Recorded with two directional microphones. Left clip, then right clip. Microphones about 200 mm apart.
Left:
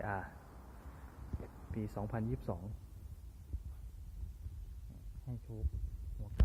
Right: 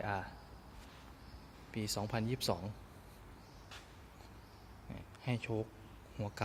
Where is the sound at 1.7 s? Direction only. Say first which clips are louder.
Right 4 dB; 10° right (ahead or behind).